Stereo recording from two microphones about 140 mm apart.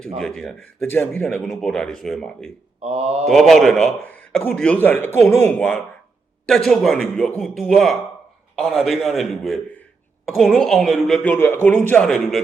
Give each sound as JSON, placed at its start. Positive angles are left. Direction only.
{"t": 0.2, "sound": "speech", "side_deg": 5}
{"t": 2.8, "sound": "mantra", "side_deg": -45}
{"t": 3.2, "sound": "a man's voice", "side_deg": 0}